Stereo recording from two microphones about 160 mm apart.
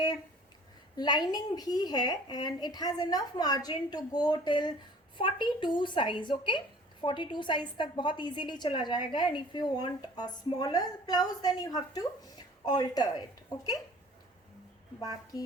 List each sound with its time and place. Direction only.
0.9 s a woman's voice: 25° left (ahead or behind)